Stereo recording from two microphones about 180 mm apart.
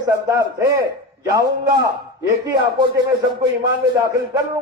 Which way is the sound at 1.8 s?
20° right (ahead or behind).